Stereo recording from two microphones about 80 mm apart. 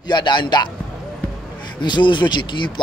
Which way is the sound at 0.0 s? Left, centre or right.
Left.